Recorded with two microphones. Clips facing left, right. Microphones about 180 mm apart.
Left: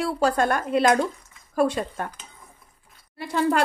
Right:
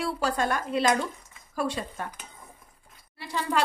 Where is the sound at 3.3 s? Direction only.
50° left (ahead or behind).